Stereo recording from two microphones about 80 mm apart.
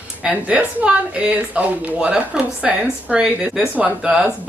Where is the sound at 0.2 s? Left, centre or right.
Centre.